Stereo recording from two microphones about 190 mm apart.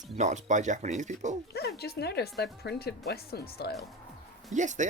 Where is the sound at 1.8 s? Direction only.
60° left (ahead or behind).